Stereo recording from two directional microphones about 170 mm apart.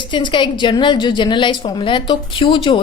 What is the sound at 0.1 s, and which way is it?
A woman's voice, 30° left (ahead or behind).